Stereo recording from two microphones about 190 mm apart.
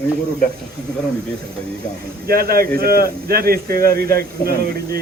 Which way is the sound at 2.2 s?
50° right (ahead or behind).